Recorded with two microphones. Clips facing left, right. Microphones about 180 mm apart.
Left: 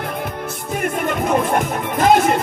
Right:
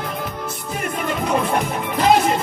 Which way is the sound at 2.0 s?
50° left (ahead or behind).